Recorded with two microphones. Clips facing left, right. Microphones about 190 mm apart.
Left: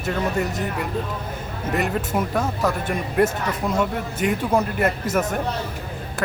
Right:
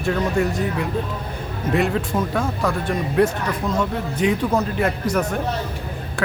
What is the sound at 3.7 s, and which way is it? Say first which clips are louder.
A woman's voice: right 1 dB; 5° left (ahead or behind).